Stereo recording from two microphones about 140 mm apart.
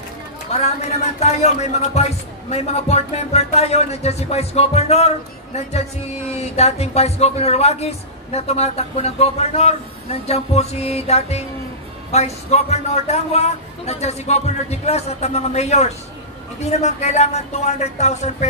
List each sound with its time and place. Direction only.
0.5 s a man's voice: 50° left (ahead or behind)